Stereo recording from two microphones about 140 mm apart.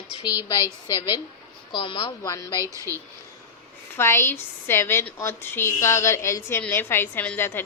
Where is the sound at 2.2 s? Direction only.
25° left (ahead or behind).